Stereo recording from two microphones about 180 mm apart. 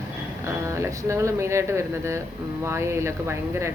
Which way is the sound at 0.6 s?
15° right (ahead or behind).